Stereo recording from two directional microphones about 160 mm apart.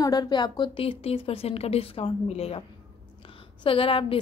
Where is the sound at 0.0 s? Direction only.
25° left (ahead or behind); by 2.6 s 40° left (ahead or behind).